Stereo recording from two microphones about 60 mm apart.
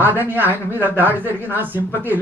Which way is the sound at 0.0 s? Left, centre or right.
Right.